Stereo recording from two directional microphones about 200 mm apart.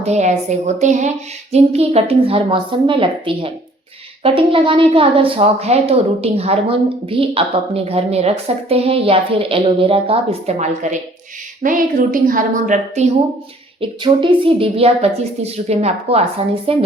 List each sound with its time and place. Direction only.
0.0 s a woman's voice: 35° right (ahead or behind)
13.8 s a woman's voice: 25° right (ahead or behind)